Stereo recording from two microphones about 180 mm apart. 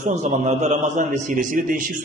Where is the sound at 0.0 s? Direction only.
40° right (ahead or behind).